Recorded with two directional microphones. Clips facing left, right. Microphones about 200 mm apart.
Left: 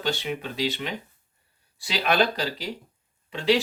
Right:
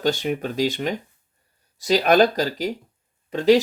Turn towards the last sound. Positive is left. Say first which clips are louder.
# right 7 dB
turn(degrees=-45)  # may be behind; listen again after turning